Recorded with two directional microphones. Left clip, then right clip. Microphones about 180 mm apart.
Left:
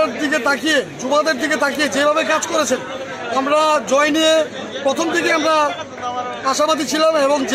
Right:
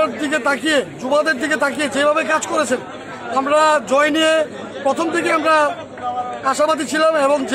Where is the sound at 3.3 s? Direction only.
5° right (ahead or behind).